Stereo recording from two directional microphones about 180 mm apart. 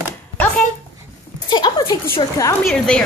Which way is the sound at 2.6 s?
5° left (ahead or behind).